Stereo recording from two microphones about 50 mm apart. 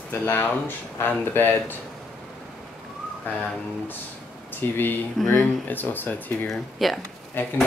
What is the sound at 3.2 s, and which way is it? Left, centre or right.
Speech, left.